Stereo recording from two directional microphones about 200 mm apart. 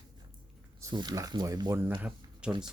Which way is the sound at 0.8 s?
20° right (ahead or behind).